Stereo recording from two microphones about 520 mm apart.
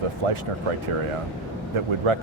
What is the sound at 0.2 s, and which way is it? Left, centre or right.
Speech, right.